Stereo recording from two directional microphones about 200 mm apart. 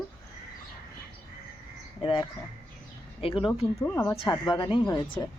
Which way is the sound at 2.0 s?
25° left (ahead or behind).